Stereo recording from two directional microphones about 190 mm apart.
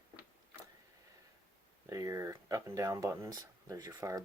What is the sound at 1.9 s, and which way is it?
Speech, 15° right (ahead or behind).